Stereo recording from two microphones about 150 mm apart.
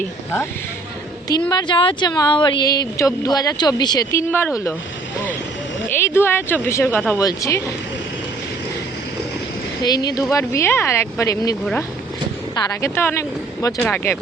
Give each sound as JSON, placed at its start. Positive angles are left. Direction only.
{"t": 1.3, "sound": "speech", "side_deg": 30}
{"t": 5.9, "sound": "a woman's voice", "side_deg": 15}
{"t": 9.8, "sound": "speech", "side_deg": 25}
{"t": 12.5, "sound": "a woman's voice", "side_deg": 15}